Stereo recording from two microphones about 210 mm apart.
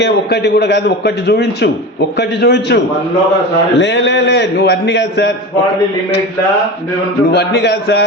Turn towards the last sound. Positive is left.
turn(degrees=55)  # may be behind; listen again after turning